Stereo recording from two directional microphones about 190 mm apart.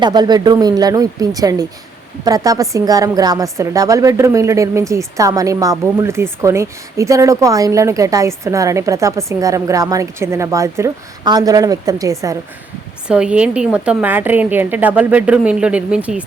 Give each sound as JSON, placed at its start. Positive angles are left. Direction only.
{"t": 0.0, "sound": "a woman's voice", "side_deg": -20}
{"t": 13.1, "sound": "a woman's voice", "side_deg": -5}